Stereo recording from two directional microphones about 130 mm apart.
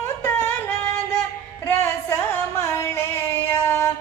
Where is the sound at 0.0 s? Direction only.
20° left (ahead or behind).